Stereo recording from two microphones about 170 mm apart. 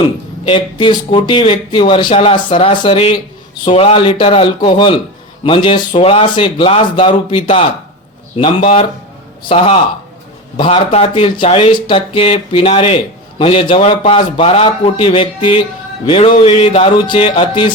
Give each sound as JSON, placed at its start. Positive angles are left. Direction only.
{"t": 0.4, "sound": "speech", "side_deg": 30}